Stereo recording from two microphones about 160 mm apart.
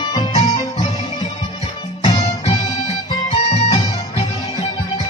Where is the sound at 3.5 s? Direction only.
45° left (ahead or behind).